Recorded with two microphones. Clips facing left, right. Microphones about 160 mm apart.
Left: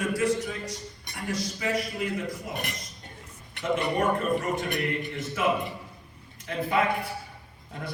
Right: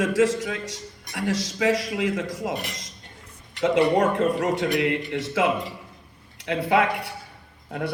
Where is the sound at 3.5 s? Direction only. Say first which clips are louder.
Right 7 dB; 90° right.